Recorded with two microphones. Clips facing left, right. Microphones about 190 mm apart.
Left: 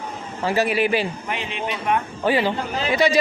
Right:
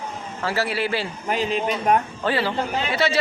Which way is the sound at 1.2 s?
40° right (ahead or behind).